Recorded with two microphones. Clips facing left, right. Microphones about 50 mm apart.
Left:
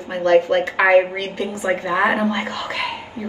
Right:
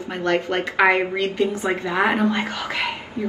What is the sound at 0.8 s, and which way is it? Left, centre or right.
Speech, left.